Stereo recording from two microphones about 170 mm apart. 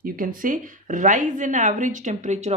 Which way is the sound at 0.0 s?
55° right (ahead or behind).